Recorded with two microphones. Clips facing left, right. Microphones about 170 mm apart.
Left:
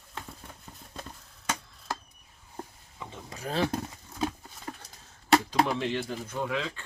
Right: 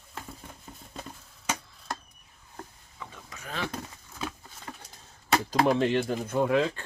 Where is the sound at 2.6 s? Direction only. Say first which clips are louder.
Left 2 dB; 20° left (ahead or behind).